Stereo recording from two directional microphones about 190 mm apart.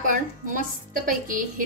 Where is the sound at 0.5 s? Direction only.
45° right (ahead or behind).